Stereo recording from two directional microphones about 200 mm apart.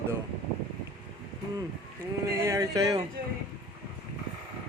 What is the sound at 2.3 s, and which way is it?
Speech, 15° right (ahead or behind).